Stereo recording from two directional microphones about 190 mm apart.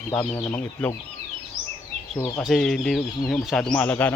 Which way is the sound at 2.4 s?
Centre (ahead or behind).